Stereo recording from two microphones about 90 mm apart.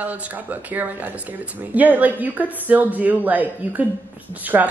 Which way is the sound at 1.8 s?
20° right (ahead or behind).